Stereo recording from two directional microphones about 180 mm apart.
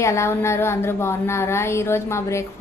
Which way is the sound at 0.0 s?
15° left (ahead or behind).